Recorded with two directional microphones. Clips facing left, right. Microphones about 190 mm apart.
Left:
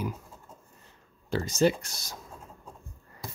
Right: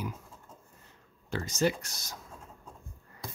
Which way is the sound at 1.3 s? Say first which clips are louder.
Left 5 dB; 30° left (ahead or behind).